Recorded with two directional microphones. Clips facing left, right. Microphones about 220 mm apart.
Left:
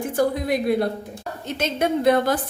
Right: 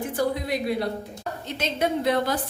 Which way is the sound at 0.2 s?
50° left (ahead or behind).